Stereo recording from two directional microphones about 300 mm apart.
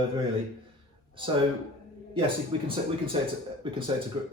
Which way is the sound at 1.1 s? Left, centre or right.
Centre.